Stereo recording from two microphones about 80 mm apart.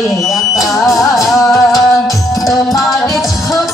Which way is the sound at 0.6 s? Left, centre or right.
Centre.